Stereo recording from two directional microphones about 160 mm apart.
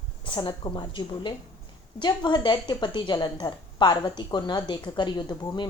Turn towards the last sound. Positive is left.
turn(degrees=25)  # may be behind; listen again after turning